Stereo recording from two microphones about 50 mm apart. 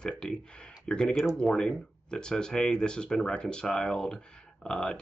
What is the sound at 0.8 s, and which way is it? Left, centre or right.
Speech, centre.